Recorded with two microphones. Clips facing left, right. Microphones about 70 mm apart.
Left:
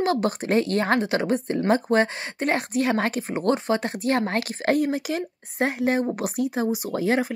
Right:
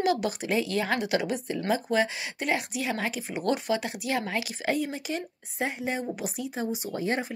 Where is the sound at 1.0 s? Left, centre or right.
Left.